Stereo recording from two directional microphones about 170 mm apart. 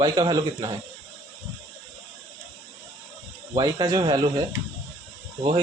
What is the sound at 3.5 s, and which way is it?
Speech, 25° right (ahead or behind).